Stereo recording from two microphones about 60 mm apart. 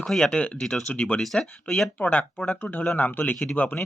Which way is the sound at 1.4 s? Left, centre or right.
Centre.